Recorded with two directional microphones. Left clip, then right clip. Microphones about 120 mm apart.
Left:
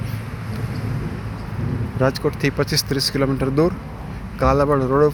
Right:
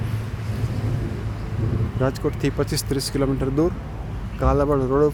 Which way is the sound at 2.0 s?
5° right (ahead or behind).